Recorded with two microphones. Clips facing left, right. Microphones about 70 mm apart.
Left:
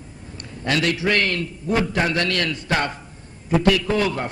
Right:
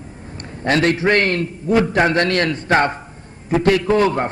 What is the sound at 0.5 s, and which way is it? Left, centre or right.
A man's voice, right.